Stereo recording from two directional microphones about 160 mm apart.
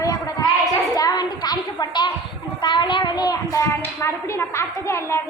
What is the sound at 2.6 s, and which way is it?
A woman's voice, 30° left (ahead or behind).